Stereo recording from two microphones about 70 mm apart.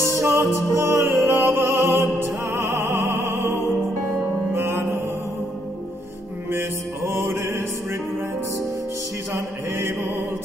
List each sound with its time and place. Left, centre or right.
0.2 s music: right
6.5 s music: right
9.3 s music: right